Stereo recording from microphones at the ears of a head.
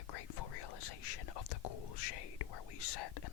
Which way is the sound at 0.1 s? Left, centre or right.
Left.